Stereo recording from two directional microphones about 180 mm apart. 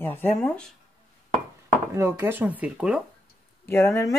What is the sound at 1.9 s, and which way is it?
Speech, 15° right (ahead or behind).